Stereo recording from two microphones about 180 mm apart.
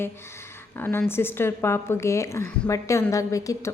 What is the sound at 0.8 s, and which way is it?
A woman's voice, 10° left (ahead or behind).